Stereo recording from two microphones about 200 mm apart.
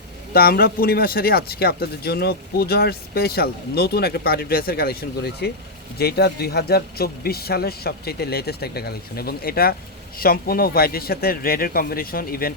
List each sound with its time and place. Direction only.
0.3 s speech: 50° left (ahead or behind)